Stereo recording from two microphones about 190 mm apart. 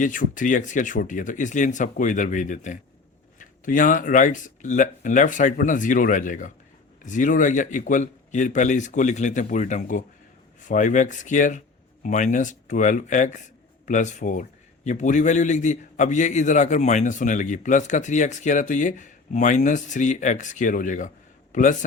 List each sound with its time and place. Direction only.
0.0 s a man's voice: 45° left (ahead or behind)